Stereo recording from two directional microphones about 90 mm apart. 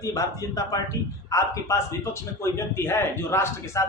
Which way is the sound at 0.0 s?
40° left (ahead or behind).